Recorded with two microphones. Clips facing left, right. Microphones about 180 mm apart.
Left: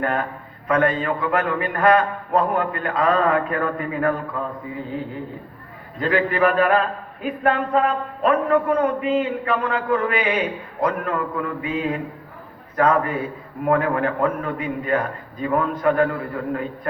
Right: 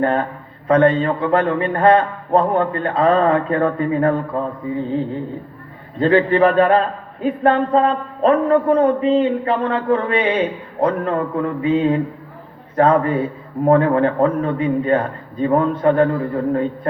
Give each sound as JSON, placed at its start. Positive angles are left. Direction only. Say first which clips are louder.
{"t": 0.0, "sound": "a man's voice", "louder": "right 5 dB", "side_deg": -30}